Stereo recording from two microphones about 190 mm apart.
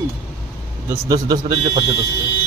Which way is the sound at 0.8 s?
20° right (ahead or behind).